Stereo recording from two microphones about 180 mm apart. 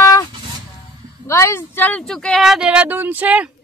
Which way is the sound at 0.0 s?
20° left (ahead or behind).